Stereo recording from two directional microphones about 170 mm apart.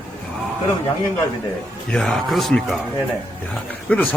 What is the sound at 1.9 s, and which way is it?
Speech, centre (ahead or behind).